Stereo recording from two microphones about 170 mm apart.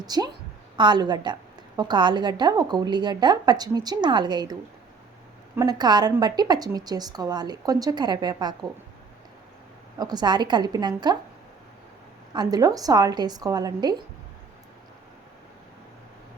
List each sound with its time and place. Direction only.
0.0 s a woman's voice: 25° right (ahead or behind)
5.5 s a woman's voice: 25° right (ahead or behind)
10.0 s a woman's voice: 25° right (ahead or behind)
12.3 s a woman's voice: 25° right (ahead or behind)